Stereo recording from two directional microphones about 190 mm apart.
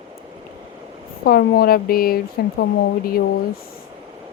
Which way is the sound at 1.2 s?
55° left (ahead or behind).